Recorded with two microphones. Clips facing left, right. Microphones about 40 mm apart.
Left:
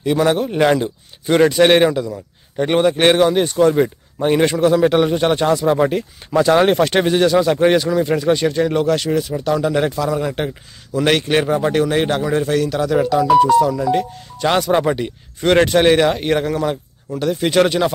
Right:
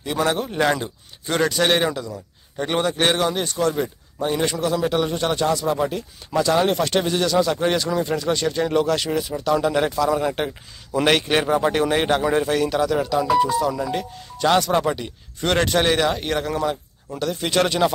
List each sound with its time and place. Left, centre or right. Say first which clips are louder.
0.0 s a man's voice: left 6 dB; centre
12.9 s speech: left 5 dB; centre
13.4 s speech: left 7 dB; centre
14.4 s a man's voice: left 2 dB; centre